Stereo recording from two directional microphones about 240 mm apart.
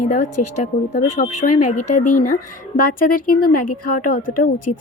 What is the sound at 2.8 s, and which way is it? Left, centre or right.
Speech, left.